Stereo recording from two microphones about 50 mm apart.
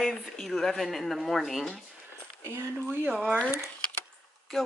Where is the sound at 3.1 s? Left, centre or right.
Right.